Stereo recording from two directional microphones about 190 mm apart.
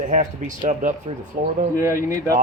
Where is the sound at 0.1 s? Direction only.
40° right (ahead or behind).